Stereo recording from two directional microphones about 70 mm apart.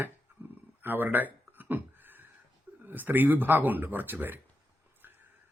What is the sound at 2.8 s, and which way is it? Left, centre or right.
Speech, right.